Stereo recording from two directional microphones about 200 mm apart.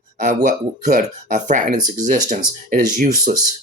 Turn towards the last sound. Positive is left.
turn(degrees=-45)  # may be behind; listen again after turning